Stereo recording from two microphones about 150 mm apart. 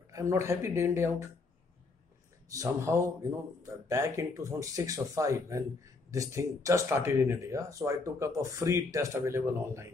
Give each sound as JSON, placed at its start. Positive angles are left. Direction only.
{"t": 0.1, "sound": "speech", "side_deg": -20}
{"t": 2.5, "sound": "speech", "side_deg": -20}